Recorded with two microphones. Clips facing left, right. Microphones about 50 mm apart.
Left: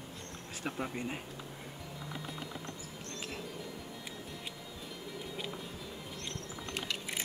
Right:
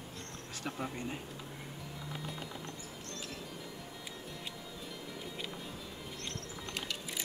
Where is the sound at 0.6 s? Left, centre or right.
Centre.